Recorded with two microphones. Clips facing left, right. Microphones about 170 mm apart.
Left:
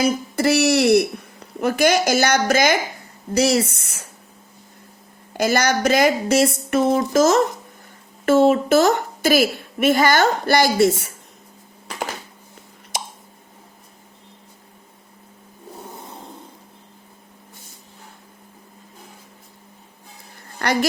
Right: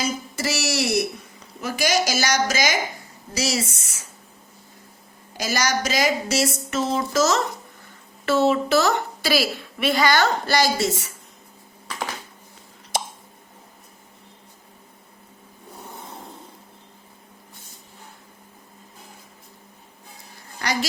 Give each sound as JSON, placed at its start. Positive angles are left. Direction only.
{"t": 0.0, "sound": "speech", "side_deg": 60}
{"t": 5.4, "sound": "a woman's voice", "side_deg": 55}